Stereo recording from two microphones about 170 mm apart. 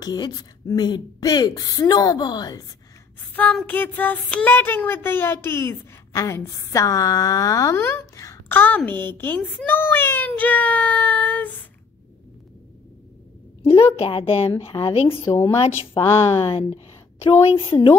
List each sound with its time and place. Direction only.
0.0 s a woman's voice: 25° left (ahead or behind)
3.3 s child singing: 10° left (ahead or behind)
13.9 s speech: 35° left (ahead or behind)
15.2 s child singing: 20° left (ahead or behind)
16.3 s speech: 35° left (ahead or behind)